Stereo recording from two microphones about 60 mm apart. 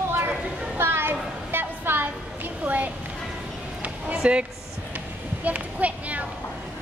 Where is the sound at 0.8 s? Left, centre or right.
Right.